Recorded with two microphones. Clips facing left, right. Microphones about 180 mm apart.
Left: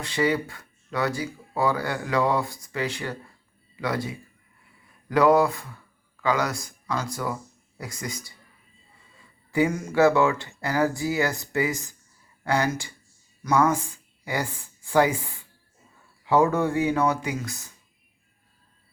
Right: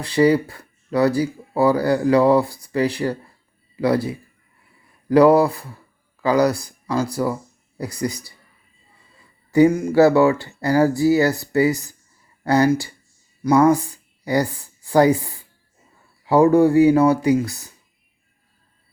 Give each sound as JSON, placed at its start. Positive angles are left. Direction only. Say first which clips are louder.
{"t": 0.0, "sound": "speech", "louder": "right 8 dB", "side_deg": -35}
{"t": 9.5, "sound": "speech", "louder": "right 9 dB", "side_deg": -35}